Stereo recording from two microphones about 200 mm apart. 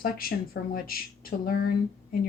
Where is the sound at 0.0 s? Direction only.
45° left (ahead or behind).